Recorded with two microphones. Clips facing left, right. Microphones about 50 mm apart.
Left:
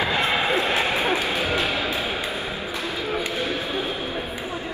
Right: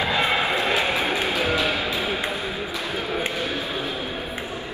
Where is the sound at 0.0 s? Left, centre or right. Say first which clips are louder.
Even; left.